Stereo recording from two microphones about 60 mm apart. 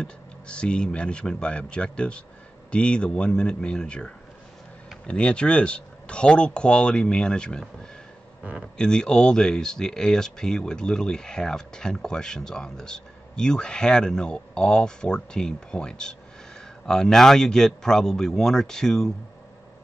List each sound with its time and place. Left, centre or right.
0.0 s speech: centre
8.7 s speech: centre